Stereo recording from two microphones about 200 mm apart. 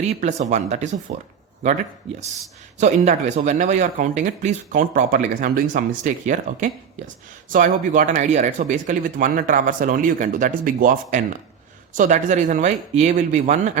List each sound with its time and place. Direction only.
0.0 s speech: 35° right (ahead or behind)
2.7 s speech: 35° right (ahead or behind)